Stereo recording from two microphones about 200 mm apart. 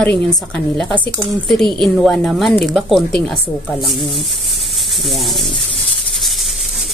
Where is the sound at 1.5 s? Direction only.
Centre (ahead or behind).